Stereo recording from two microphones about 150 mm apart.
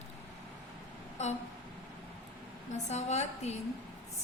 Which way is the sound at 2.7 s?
50° left (ahead or behind).